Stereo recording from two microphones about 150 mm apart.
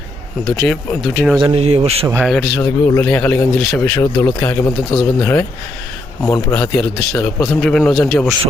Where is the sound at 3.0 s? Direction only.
10° left (ahead or behind).